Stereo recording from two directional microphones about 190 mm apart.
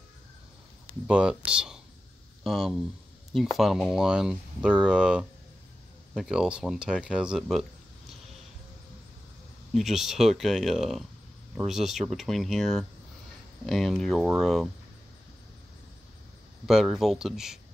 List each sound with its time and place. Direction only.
1.0 s speech: 5° right (ahead or behind)
9.8 s speech: centre (ahead or behind)
16.6 s speech: centre (ahead or behind)